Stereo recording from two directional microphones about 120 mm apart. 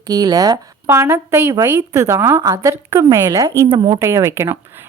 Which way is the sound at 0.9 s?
20° right (ahead or behind).